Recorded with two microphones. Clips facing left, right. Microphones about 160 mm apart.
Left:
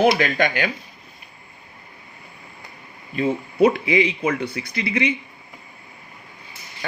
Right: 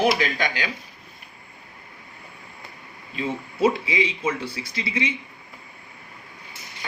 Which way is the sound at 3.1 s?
60° left (ahead or behind).